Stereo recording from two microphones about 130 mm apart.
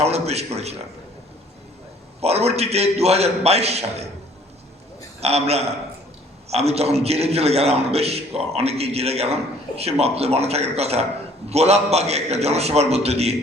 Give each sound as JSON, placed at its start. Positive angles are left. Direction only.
{"t": 0.0, "sound": "a man's voice", "side_deg": -55}
{"t": 2.2, "sound": "a man's voice", "side_deg": -55}
{"t": 5.2, "sound": "a man's voice", "side_deg": -55}